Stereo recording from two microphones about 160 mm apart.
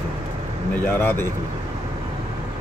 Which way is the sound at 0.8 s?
15° left (ahead or behind).